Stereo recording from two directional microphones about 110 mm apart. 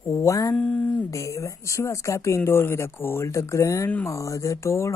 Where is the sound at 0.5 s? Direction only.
10° left (ahead or behind).